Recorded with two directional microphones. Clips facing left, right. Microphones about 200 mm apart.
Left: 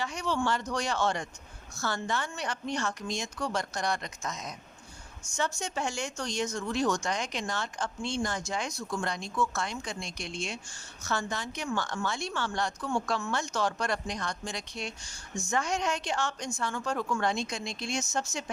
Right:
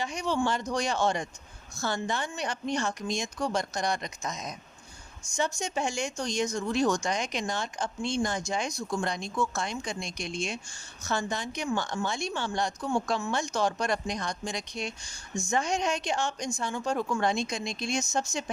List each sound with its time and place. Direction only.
0.0 s a woman's voice: 15° right (ahead or behind)